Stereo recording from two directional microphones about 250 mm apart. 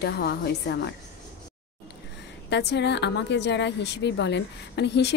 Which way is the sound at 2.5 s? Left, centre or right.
Left.